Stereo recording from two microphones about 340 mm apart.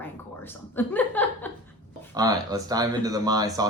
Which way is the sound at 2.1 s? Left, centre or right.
Centre.